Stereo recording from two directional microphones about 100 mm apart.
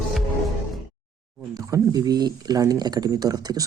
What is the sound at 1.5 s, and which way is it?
Speech, 40° right (ahead or behind).